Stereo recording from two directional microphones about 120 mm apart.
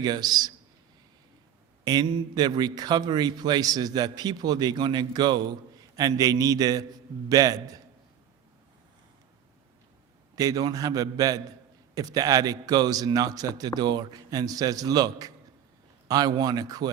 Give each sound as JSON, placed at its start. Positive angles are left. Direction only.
{"t": 0.0, "sound": "a man's voice", "side_deg": -35}
{"t": 1.8, "sound": "a man's voice", "side_deg": -35}
{"t": 10.3, "sound": "a man's voice", "side_deg": -30}